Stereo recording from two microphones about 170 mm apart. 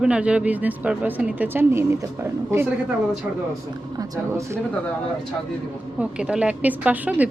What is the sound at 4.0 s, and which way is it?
Speech, 20° right (ahead or behind).